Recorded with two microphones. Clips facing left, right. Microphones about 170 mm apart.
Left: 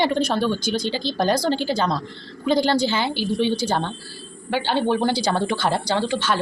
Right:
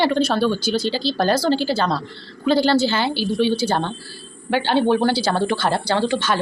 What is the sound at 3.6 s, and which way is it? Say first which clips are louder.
Speech: right 2 dB; 10° right (ahead or behind).